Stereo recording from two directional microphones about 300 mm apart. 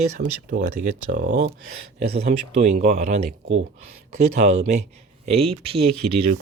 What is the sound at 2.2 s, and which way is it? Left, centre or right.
Speech, right.